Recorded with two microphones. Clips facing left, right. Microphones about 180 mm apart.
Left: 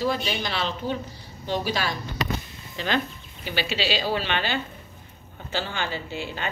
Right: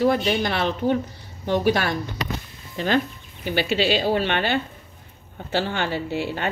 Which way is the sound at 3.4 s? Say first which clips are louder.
Right 6 dB; 50° right (ahead or behind).